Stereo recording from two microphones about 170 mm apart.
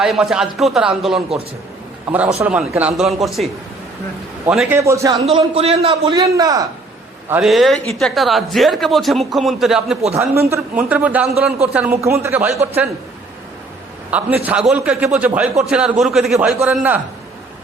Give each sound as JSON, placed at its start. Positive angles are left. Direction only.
{"t": 0.0, "sound": "speech", "side_deg": -5}
{"t": 4.7, "sound": "a man's voice", "side_deg": -15}
{"t": 5.2, "sound": "a man's voice", "side_deg": -35}
{"t": 6.1, "sound": "a man's voice", "side_deg": -20}
{"t": 7.4, "sound": "speech", "side_deg": 0}
{"t": 10.2, "sound": "a man's voice", "side_deg": -15}
{"t": 14.1, "sound": "a man's voice", "side_deg": -10}